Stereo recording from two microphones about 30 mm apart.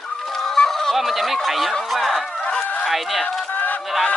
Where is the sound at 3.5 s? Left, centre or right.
Left.